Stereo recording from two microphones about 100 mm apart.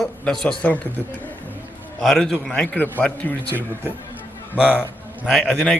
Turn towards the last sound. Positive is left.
turn(degrees=0)  # may be behind; listen again after turning